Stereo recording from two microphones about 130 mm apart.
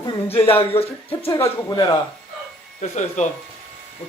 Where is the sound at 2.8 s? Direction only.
65° left (ahead or behind).